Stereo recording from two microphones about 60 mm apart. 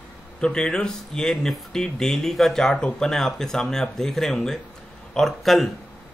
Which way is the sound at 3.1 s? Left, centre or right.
Centre.